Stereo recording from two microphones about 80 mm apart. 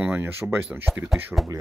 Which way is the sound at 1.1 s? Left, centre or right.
Centre.